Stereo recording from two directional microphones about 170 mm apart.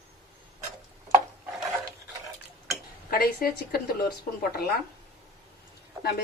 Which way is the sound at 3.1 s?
60° left (ahead or behind).